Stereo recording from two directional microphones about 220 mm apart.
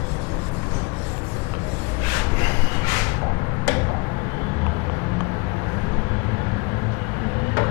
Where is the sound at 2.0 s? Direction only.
15° left (ahead or behind).